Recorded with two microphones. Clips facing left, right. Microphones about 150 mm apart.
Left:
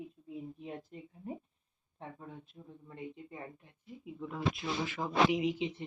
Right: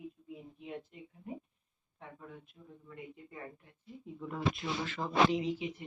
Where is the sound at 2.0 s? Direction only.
35° left (ahead or behind).